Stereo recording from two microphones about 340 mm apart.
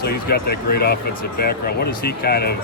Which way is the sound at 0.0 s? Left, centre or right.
Left.